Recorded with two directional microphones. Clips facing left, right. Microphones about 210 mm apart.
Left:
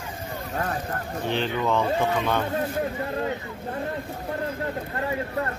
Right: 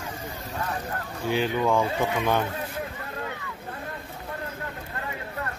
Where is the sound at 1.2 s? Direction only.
10° right (ahead or behind).